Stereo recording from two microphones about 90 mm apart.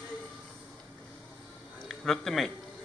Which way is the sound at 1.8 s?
5° left (ahead or behind).